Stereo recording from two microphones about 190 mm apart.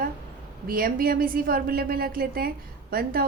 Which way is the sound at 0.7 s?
50° right (ahead or behind).